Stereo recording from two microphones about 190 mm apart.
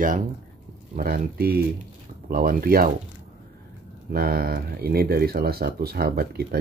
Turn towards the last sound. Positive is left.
turn(degrees=-55)  # may be behind; listen again after turning